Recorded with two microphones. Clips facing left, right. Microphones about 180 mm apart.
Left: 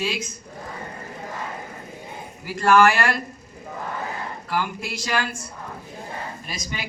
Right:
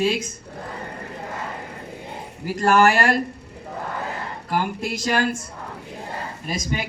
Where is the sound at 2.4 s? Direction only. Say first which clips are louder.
Even; 45° right (ahead or behind).